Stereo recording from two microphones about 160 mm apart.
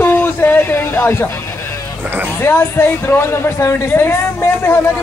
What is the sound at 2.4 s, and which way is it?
Speech, 15° left (ahead or behind).